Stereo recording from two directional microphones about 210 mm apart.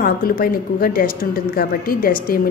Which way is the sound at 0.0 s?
45° left (ahead or behind).